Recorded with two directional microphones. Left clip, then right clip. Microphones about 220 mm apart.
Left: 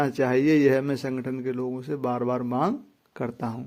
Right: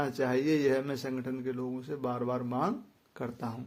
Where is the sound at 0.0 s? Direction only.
30° left (ahead or behind).